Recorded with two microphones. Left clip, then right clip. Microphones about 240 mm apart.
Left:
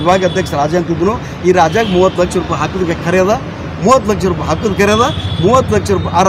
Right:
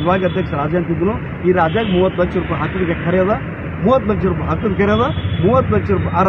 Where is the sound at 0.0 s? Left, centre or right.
Left.